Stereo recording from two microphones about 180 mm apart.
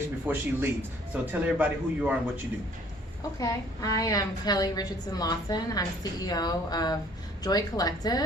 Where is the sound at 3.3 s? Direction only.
20° left (ahead or behind).